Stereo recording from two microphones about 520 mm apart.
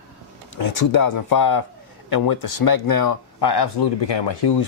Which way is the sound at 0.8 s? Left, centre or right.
Left.